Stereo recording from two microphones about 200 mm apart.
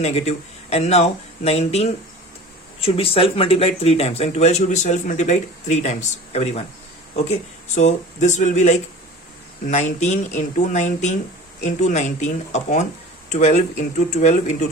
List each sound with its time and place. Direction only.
0.0 s speech: 35° left (ahead or behind)